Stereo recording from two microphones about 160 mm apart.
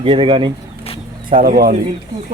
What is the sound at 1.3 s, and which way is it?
Speech, 65° right (ahead or behind).